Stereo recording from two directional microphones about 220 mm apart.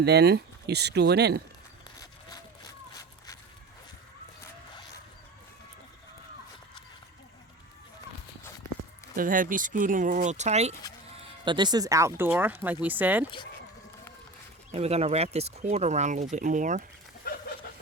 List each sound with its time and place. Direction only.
0.0 s speech: 50° right (ahead or behind)
9.1 s speech: 40° right (ahead or behind)
11.4 s speech: 20° right (ahead or behind)
14.7 s speech: 30° right (ahead or behind)